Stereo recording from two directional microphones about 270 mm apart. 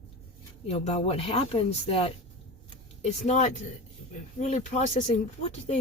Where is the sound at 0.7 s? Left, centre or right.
Left.